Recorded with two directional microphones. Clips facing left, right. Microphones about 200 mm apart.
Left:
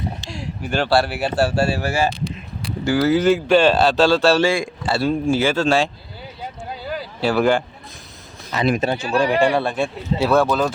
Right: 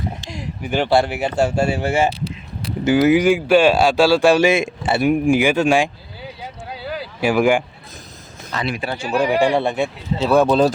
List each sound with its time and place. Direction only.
0.3 s speech: 20° right (ahead or behind)
7.2 s speech: 15° right (ahead or behind)
8.6 s speech: 45° left (ahead or behind)
9.0 s speech: 15° right (ahead or behind)